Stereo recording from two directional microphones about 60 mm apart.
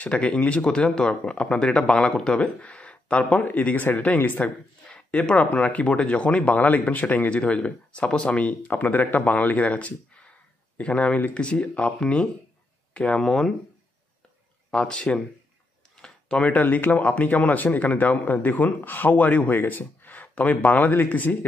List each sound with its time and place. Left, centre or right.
0.0 s speech: left
4.8 s speech: centre
14.7 s speech: centre
16.0 s a sound: centre
16.6 s speech: left